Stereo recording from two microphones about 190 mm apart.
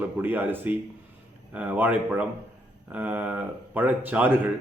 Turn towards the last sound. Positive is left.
turn(degrees=-10)  # may be behind; listen again after turning